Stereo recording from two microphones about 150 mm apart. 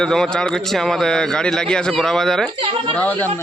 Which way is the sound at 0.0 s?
5° left (ahead or behind).